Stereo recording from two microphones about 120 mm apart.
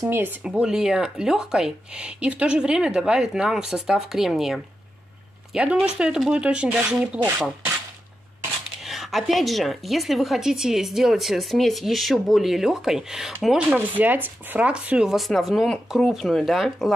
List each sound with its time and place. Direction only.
0.0 s speech: 20° right (ahead or behind)
0.4 s a woman's voice: 5° right (ahead or behind)
7.2 s speech: 15° right (ahead or behind)
8.8 s a woman's voice: centre (ahead or behind)